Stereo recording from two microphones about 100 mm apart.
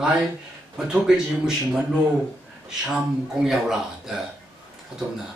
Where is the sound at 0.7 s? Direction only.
5° right (ahead or behind).